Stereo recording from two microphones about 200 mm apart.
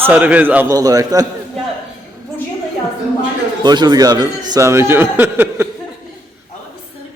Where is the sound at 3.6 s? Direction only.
20° right (ahead or behind).